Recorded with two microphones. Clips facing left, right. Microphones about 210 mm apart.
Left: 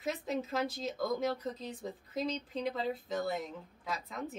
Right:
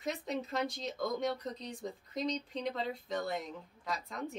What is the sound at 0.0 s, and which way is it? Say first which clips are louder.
A woman's voice: left 1 dB; 5° left (ahead or behind).